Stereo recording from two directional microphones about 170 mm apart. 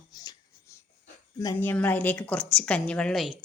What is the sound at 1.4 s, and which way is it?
A woman's voice, 10° left (ahead or behind).